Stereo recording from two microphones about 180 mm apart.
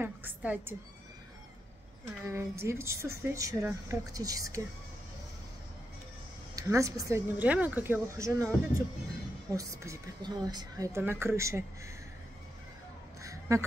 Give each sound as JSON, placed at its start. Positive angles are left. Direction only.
{"t": 0.0, "sound": "a woman's voice", "side_deg": -10}
{"t": 2.0, "sound": "a woman's voice", "side_deg": -15}
{"t": 6.5, "sound": "a woman's voice", "side_deg": -20}
{"t": 13.2, "sound": "a sound", "side_deg": -15}